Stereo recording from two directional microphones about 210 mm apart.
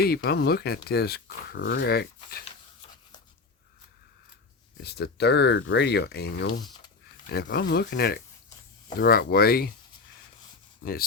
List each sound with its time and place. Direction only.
0.3 s speech: 50° left (ahead or behind)
4.8 s speech: 50° left (ahead or behind)